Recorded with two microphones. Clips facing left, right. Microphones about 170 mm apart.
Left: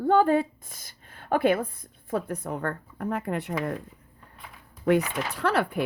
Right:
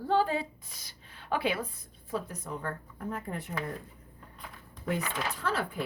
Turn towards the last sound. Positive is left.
turn(degrees=70)  # may be behind; listen again after turning